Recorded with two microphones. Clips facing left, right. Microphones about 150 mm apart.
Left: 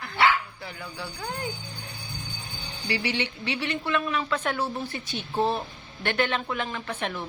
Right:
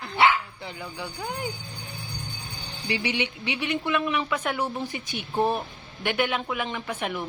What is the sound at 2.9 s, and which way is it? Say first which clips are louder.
A man's voice: right 1 dB; 20° right (ahead or behind).